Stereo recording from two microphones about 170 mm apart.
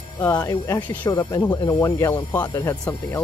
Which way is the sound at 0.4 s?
20° left (ahead or behind).